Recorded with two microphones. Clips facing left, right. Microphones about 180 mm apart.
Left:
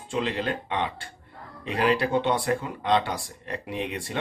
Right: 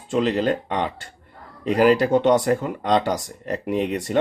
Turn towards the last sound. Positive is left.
turn(degrees=-40)  # may be behind; listen again after turning